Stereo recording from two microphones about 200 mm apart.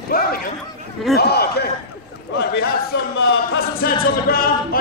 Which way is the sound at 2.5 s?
50° left (ahead or behind).